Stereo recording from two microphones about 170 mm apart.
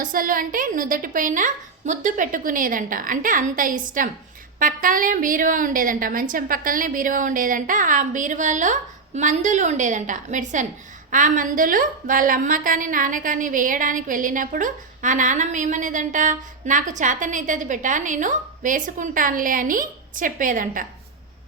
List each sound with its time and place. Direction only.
0.0 s a woman's voice: 55° right (ahead or behind)